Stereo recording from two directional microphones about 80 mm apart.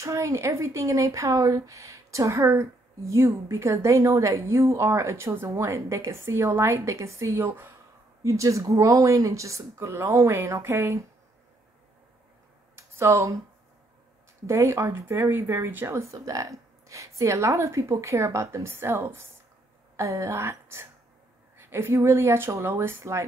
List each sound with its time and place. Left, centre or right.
0.0 s speech: right
7.4 s speech: right
8.2 s speech: right
12.7 s a sound: right
14.4 s speech: right